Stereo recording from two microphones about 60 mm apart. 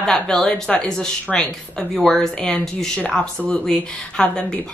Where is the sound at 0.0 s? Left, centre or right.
Centre.